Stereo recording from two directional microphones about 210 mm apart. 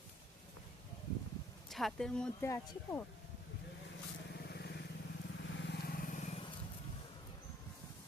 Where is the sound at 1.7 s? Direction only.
Centre (ahead or behind).